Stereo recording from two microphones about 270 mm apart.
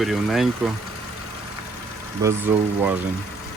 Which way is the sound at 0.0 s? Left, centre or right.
Centre.